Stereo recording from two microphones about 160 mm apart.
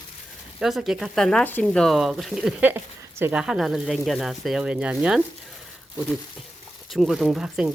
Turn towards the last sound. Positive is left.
turn(degrees=-5)  # may be behind; listen again after turning